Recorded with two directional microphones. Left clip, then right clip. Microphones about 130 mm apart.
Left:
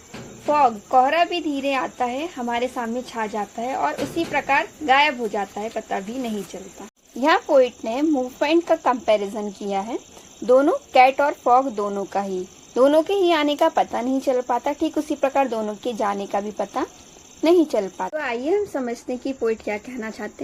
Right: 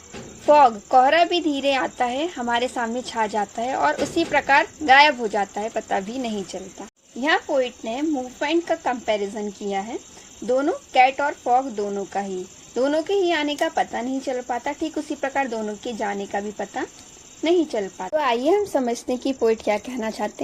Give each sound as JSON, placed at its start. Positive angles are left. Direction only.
{"t": 0.4, "sound": "a woman's voice", "side_deg": -55}
{"t": 7.2, "sound": "speech", "side_deg": 40}
{"t": 18.2, "sound": "speech", "side_deg": -35}
{"t": 20.1, "sound": "speech", "side_deg": -20}